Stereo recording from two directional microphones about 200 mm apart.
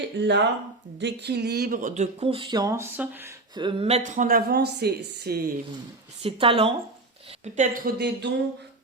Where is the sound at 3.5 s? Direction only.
25° right (ahead or behind); by 5.5 s 50° right (ahead or behind).